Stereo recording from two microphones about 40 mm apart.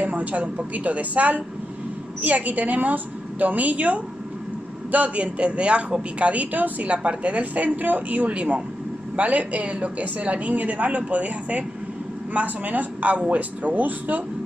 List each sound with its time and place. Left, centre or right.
0.0 s a woman's voice: right
6.9 s a woman's voice: right
8.3 s a man's voice: right